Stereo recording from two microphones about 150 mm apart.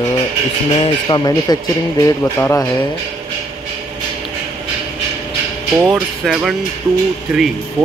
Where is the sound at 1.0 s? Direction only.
25° left (ahead or behind).